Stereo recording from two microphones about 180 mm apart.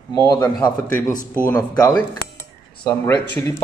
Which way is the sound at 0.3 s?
20° left (ahead or behind).